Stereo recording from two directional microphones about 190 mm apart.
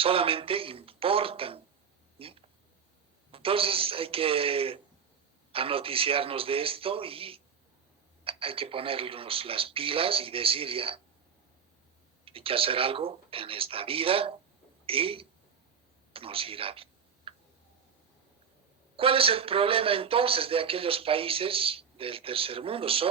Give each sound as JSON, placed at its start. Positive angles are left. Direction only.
{"t": 0.0, "sound": "a man's voice", "side_deg": -30}
{"t": 12.2, "sound": "a man's voice", "side_deg": -30}
{"t": 16.1, "sound": "computer keyboard", "side_deg": -30}
{"t": 18.9, "sound": "a man's voice", "side_deg": -30}